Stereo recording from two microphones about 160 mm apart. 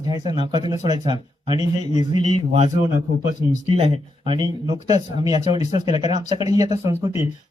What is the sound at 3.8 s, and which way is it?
Speech, 35° right (ahead or behind).